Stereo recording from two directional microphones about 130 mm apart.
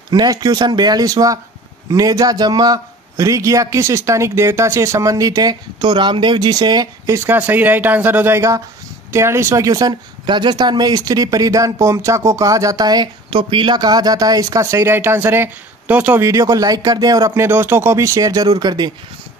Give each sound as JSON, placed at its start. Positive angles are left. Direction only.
{"t": 0.1, "sound": "speech", "side_deg": -30}
{"t": 7.2, "sound": "speech", "side_deg": -15}
{"t": 16.3, "sound": "speech", "side_deg": -25}